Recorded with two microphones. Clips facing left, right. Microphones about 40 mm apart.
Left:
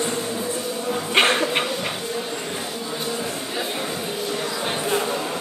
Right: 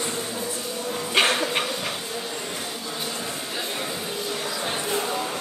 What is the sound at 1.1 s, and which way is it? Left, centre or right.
Bow-wow, left.